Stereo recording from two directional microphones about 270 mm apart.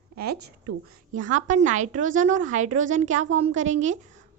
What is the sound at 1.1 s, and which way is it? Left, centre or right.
A woman's voice, right.